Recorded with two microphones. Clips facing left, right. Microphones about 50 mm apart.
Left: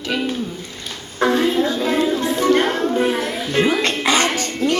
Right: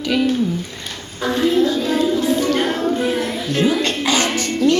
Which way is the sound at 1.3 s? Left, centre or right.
Centre.